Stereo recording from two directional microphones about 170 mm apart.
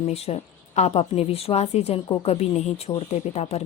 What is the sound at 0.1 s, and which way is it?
A woman's voice, 40° left (ahead or behind).